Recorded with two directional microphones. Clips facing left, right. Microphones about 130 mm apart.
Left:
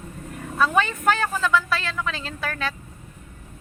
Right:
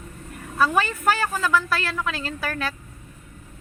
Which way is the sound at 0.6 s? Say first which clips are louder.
Even; 5° right (ahead or behind).